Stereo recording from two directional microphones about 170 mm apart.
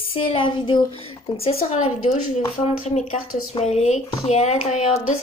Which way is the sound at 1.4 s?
40° left (ahead or behind).